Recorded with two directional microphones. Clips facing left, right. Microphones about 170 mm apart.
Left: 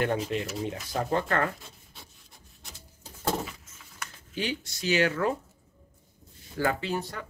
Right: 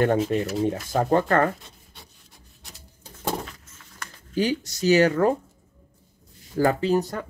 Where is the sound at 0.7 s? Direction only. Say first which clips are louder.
Right 9 dB; 50° right (ahead or behind).